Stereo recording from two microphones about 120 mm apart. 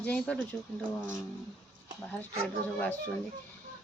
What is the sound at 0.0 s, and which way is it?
Speech, 10° left (ahead or behind).